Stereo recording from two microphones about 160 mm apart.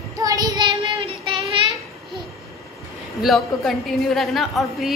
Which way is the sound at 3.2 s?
Centre (ahead or behind).